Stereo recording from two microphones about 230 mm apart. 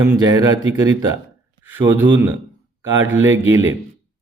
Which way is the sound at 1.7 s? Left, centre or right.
Centre.